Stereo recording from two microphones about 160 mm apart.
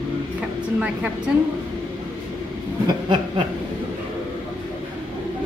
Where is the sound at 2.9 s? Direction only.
30° right (ahead or behind).